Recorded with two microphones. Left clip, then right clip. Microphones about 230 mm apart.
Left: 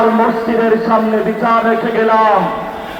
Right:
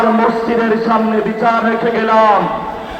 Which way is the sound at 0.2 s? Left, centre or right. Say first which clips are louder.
Even; right.